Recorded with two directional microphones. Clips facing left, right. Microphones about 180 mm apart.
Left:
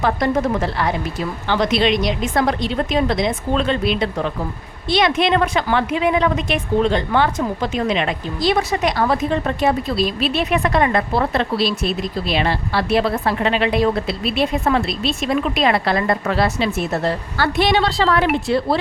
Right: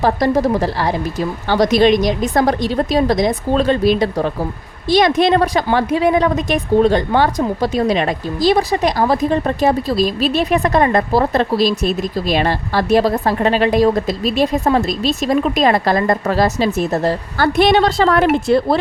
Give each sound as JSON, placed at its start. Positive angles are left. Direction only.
{"t": 0.0, "sound": "a woman's voice", "side_deg": -35}